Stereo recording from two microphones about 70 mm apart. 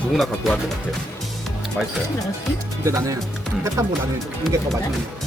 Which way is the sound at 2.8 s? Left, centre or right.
Right.